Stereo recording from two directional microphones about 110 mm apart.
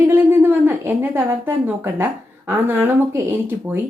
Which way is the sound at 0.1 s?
20° right (ahead or behind).